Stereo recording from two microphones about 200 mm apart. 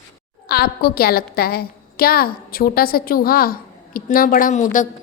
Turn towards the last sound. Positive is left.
turn(degrees=40)  # may be behind; listen again after turning